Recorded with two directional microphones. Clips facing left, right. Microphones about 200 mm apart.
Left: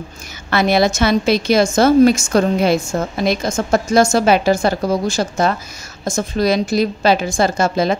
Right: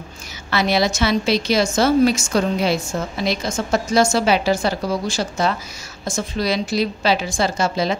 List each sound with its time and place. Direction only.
0.5 s a woman's voice: 50° left (ahead or behind)